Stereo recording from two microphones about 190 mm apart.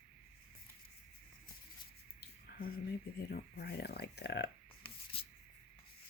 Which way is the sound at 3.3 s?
55° left (ahead or behind).